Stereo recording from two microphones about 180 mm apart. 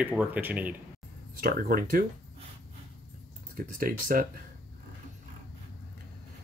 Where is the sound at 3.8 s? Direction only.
50° right (ahead or behind).